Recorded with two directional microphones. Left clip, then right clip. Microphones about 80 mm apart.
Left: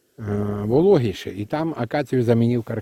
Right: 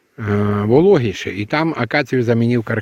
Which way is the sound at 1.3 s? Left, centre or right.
Right.